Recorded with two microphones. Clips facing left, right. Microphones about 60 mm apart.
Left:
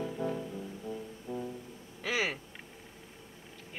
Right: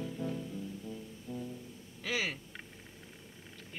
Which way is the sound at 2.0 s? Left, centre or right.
Centre.